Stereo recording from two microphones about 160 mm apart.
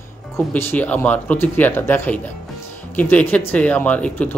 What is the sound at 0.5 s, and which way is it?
Speech, 10° left (ahead or behind).